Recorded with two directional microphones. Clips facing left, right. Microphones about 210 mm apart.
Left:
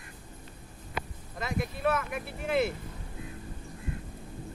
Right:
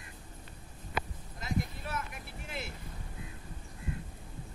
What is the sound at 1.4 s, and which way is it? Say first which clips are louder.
Speech: left 3 dB; 70° left (ahead or behind).